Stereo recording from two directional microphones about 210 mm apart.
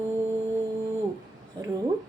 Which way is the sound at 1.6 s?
20° right (ahead or behind).